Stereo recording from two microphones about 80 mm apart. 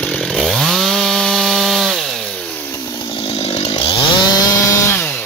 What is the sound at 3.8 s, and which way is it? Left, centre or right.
Chainsaw, left.